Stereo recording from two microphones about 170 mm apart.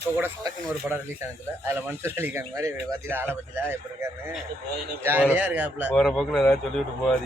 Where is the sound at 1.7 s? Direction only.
15° right (ahead or behind).